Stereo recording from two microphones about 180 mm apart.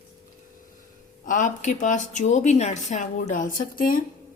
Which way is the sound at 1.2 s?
45° left (ahead or behind).